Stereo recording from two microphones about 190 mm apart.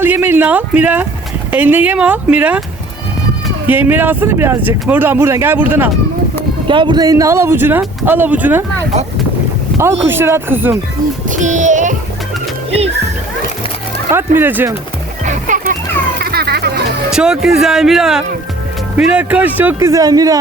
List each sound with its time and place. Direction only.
0.0 s speech: 10° right (ahead or behind)
3.7 s speech: 10° right (ahead or behind)
6.7 s speech: 25° right (ahead or behind); by 8.6 s 10° right (ahead or behind)
10.1 s speech: 10° right (ahead or behind)
11.3 s child singing: 40° right (ahead or behind)
14.3 s speech: 10° right (ahead or behind)
15.2 s music: 40° right (ahead or behind)
16.2 s a sound: 55° right (ahead or behind)
17.1 s speech: 5° right (ahead or behind); by 20.4 s 20° right (ahead or behind)